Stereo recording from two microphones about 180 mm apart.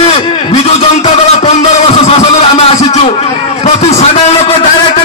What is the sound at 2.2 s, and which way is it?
Speech, 30° left (ahead or behind).